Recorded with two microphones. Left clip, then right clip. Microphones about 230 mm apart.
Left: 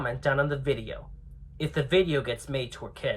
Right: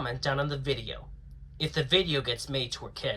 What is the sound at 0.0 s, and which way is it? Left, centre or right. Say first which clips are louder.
Speech: left 4 dB; centre.